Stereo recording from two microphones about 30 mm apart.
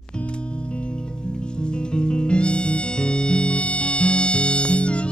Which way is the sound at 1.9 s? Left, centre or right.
Left.